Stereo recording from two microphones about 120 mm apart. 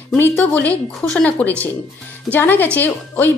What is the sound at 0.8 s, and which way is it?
A woman's voice, 10° left (ahead or behind).